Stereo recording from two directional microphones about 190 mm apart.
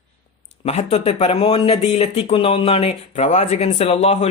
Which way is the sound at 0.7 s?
35° left (ahead or behind).